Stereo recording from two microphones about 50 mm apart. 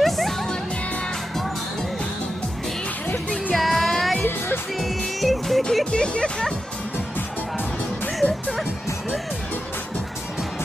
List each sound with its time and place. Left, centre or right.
0.0 s music: centre
3.5 s music: centre
5.9 s music: centre
7.2 s music: left